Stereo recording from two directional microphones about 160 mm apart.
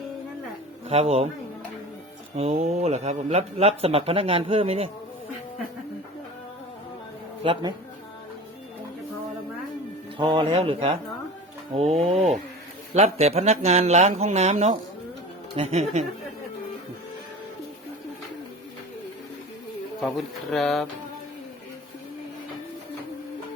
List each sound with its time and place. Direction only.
0.9 s speech: 40° right (ahead or behind)
2.3 s speech: 40° right (ahead or behind)
7.4 s speech: 30° right (ahead or behind)
10.2 s speech: 30° right (ahead or behind)
20.0 s speech: centre (ahead or behind)